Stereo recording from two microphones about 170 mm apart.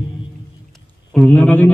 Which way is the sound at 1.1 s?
5° left (ahead or behind).